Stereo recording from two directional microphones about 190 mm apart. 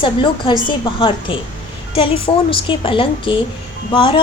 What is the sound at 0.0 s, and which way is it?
A woman's voice, 25° left (ahead or behind).